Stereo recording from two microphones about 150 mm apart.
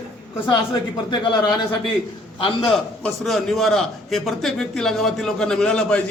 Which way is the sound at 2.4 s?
35° left (ahead or behind).